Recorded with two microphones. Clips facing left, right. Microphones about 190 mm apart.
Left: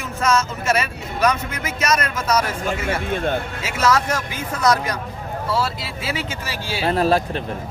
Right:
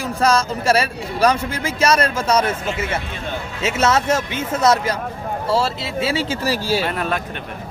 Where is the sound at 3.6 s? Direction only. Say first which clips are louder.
Right 3 dB; 25° right (ahead or behind).